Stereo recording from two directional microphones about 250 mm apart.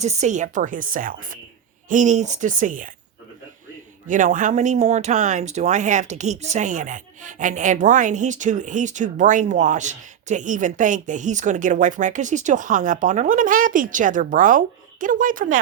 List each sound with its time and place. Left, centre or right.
0.0 s speech: right
4.0 s speech: right